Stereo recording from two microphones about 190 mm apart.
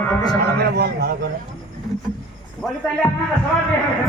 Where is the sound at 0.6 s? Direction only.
55° right (ahead or behind).